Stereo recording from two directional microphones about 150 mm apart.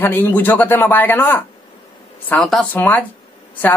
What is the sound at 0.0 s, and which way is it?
Speech, 15° left (ahead or behind).